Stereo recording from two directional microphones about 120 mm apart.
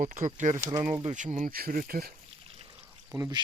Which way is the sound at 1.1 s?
90° right.